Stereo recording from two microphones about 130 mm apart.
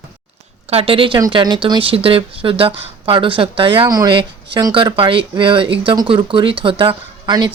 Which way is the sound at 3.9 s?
30° right (ahead or behind).